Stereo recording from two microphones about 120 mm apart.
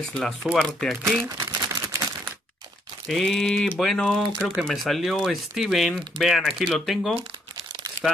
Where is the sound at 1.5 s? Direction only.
25° right (ahead or behind).